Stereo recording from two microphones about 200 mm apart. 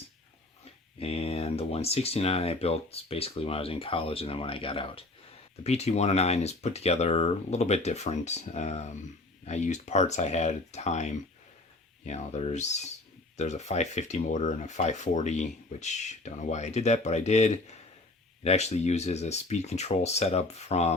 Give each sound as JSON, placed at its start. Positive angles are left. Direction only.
{"t": 0.9, "sound": "speech", "side_deg": 30}